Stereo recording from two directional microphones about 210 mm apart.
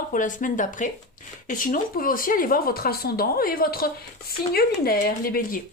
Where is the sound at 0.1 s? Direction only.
40° left (ahead or behind).